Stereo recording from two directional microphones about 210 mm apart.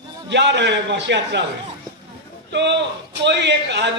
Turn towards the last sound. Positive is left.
turn(degrees=-55)  # may be behind; listen again after turning